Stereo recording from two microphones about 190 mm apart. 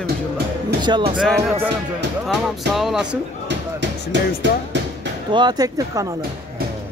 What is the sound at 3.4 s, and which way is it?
Music, 70° right (ahead or behind).